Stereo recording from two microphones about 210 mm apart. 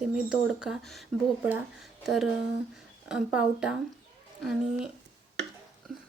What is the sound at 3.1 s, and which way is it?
Speech, 5° right (ahead or behind).